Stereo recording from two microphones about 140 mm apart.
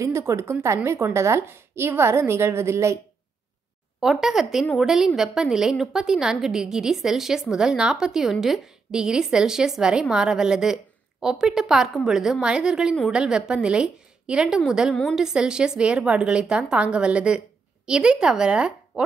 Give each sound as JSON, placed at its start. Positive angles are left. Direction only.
{"t": 0.0, "sound": "a woman's voice", "side_deg": -20}
{"t": 4.0, "sound": "a woman's voice", "side_deg": 0}